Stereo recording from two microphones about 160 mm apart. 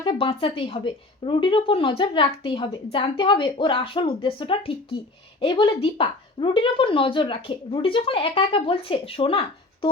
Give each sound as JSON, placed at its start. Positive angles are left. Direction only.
{"t": 0.0, "sound": "a woman's voice", "side_deg": 30}